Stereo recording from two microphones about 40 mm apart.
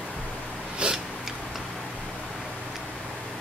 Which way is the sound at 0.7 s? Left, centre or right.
Right.